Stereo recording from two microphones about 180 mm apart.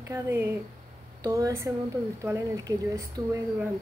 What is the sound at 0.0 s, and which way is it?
A woman's voice, 15° right (ahead or behind).